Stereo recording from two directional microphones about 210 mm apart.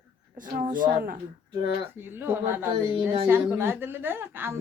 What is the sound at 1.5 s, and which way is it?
Speech, 20° right (ahead or behind).